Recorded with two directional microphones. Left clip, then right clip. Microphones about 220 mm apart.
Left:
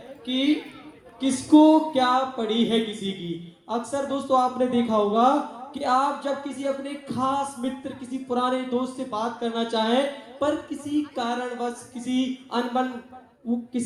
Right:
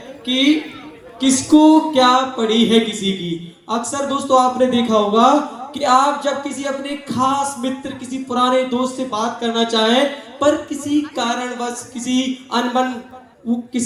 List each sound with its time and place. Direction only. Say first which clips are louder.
0.3 s speech: right 8 dB; 45° right (ahead or behind)